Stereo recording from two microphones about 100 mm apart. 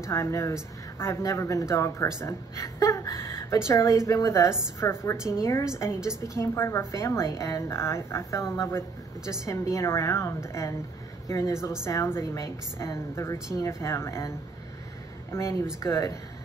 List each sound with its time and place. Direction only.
0.0 s a woman's voice: 30° left (ahead or behind)
15.3 s a woman's voice: 25° left (ahead or behind)